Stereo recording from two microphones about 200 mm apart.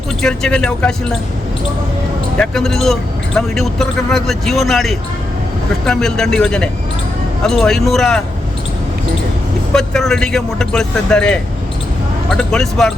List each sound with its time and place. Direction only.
0.2 s a man's voice: 5° left (ahead or behind)
2.4 s a man's voice: centre (ahead or behind)
9.7 s a man's voice: centre (ahead or behind)